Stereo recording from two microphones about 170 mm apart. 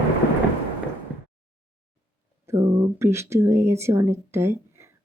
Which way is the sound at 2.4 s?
15° right (ahead or behind).